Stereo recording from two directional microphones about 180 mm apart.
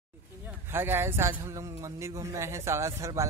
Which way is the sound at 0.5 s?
10° right (ahead or behind).